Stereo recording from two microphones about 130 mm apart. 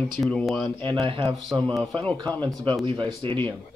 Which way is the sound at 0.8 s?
45° right (ahead or behind).